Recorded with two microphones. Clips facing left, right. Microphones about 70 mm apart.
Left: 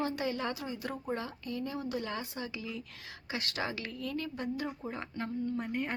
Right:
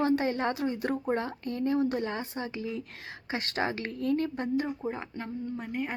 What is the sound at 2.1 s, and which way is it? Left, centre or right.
A woman's voice, right.